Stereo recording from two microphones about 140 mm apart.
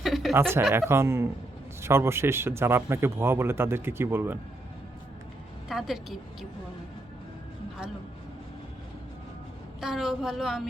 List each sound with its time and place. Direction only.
0.0 s a sound: centre (ahead or behind)
0.7 s a man's voice: 20° right (ahead or behind)
5.6 s a woman's voice: centre (ahead or behind)
9.8 s a woman's voice: 5° right (ahead or behind)